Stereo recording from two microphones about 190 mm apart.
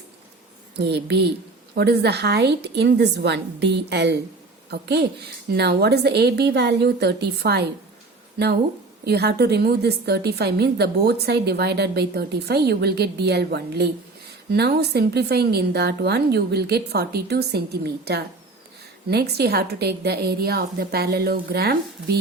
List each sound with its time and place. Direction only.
0.8 s a woman's voice: 60° right (ahead or behind)